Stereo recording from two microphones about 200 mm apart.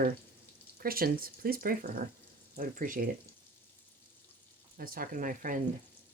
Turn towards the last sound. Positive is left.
turn(degrees=-40)  # may be behind; listen again after turning